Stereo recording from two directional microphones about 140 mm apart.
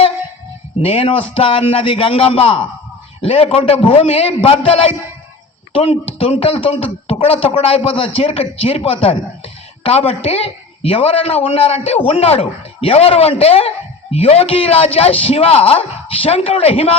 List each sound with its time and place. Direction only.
0.8 s a man's voice: 40° left (ahead or behind)